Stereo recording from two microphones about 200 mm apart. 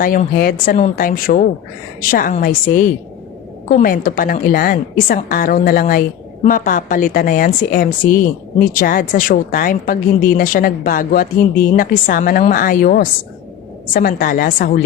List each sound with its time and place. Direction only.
0.0 s a woman's voice: 45° left (ahead or behind)